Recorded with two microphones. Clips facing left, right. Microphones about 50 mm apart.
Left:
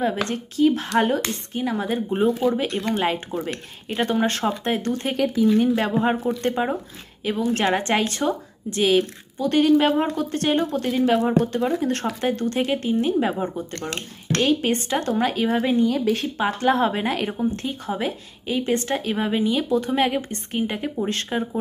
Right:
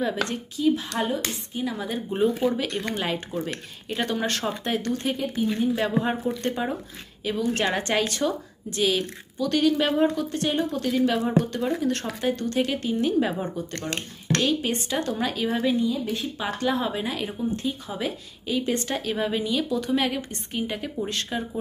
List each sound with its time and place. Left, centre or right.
0.0 s a woman's voice: left
1.6 s a woman's voice: left
2.5 s a woman's voice: left
5.1 s speech: left
5.9 s a woman's voice: left
14.4 s a woman's voice: left
15.8 s a woman's voice: left
16.3 s a woman's voice: left